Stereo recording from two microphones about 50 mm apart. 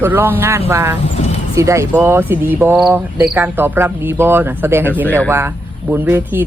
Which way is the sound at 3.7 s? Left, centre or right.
Right.